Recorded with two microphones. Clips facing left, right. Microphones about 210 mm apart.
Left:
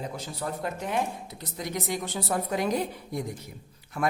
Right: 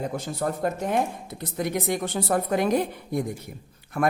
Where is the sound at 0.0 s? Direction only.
50° right (ahead or behind).